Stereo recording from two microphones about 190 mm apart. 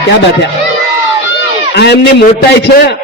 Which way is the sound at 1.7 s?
60° left (ahead or behind).